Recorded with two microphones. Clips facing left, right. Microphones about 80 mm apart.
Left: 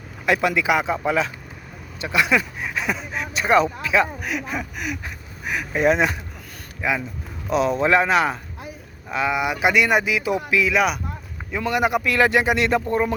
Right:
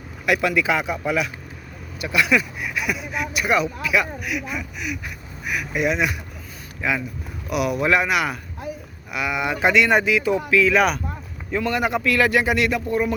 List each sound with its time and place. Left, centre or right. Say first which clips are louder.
0.3 s speech: left 1 dB; left
6.8 s speech: even; centre
10.7 s speech: right 2 dB; centre
11.5 s speech: left 1 dB; centre